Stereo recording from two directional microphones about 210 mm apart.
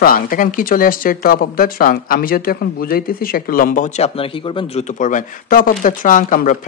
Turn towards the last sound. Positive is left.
turn(degrees=40)  # may be behind; listen again after turning